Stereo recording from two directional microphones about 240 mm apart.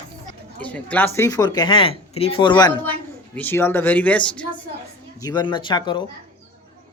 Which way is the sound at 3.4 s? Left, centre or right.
Centre.